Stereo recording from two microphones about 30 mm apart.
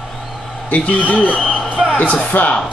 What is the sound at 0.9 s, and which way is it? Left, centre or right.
Speech, left.